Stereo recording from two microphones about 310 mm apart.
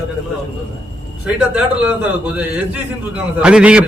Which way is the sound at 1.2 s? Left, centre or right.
Centre.